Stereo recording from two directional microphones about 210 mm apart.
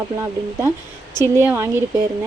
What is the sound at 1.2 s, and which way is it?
Speech, 10° right (ahead or behind).